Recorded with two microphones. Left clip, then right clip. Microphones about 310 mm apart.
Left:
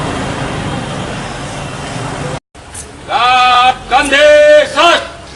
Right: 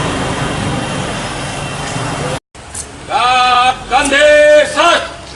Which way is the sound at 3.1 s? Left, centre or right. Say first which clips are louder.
Left 2 dB; centre.